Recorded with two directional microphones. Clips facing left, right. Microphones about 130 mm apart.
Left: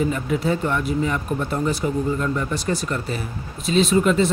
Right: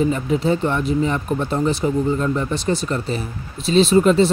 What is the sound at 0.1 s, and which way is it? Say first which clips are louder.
Speech: right 3 dB; 25° right (ahead or behind).